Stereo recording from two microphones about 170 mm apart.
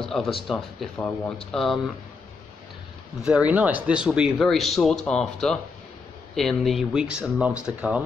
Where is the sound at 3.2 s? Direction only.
5° right (ahead or behind).